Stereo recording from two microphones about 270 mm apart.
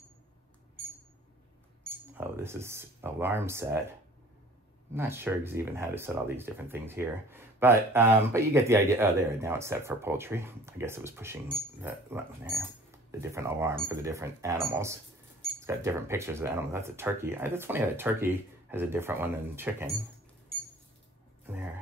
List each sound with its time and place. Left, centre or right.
2.1 s speech: centre
4.9 s speech: centre
21.5 s speech: centre